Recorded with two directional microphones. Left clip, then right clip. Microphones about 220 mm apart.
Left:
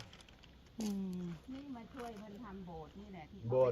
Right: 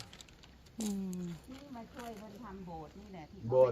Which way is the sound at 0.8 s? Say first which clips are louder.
Right 2 dB; 10° left (ahead or behind).